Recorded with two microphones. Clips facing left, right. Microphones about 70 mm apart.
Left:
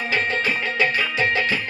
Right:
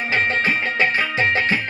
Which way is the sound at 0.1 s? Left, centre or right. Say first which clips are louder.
Right 3 dB; right.